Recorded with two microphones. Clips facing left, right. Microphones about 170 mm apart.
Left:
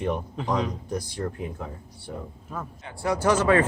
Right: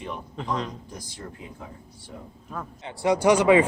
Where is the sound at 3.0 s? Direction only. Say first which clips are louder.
Right 3 dB; 15° right (ahead or behind).